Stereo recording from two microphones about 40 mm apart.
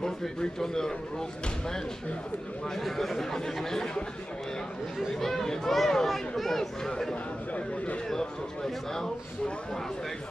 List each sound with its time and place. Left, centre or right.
0.0 s speech: centre
2.8 s speech: centre
5.2 s speech: centre
7.5 s a man's voice: left
8.1 s speech: centre